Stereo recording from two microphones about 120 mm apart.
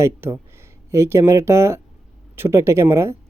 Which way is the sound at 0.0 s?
20° right (ahead or behind).